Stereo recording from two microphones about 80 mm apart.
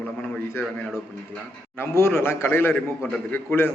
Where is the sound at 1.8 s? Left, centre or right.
Left.